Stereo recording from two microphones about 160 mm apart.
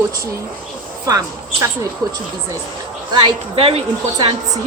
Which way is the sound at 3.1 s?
35° right (ahead or behind).